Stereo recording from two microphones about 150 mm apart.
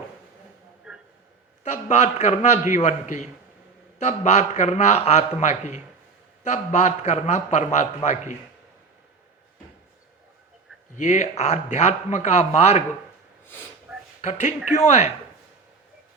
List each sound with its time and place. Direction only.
0.9 s a sound: 5° right (ahead or behind)
1.6 s a man's voice: 50° left (ahead or behind)
10.9 s a man's voice: 50° left (ahead or behind)
14.2 s a man's voice: 50° left (ahead or behind)